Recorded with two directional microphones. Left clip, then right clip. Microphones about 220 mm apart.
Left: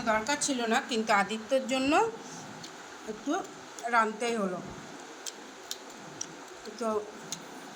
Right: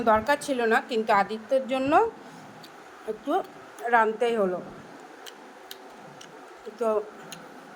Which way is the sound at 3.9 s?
15° right (ahead or behind).